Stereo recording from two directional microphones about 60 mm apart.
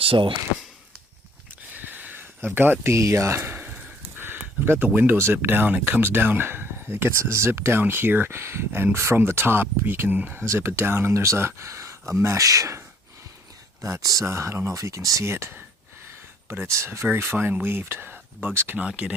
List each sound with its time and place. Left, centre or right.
1.7 s a sound: right
2.9 s a sound: right
4.9 s speech: right
10.4 s speech: right
11.1 s speech: right
13.8 s speech: right
14.3 s speech: right
15.3 s speech: right
17.3 s speech: right
18.8 s speech: right